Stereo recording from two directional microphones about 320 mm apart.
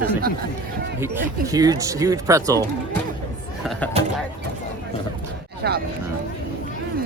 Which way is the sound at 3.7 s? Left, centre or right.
Centre.